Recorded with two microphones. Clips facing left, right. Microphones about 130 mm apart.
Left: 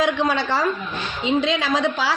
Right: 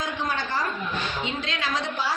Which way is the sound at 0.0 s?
90° left.